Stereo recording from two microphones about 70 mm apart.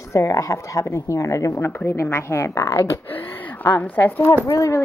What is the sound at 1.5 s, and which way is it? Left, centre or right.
A woman's voice, left.